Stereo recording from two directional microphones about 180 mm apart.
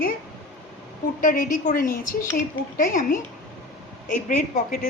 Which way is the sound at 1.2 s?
45° left (ahead or behind).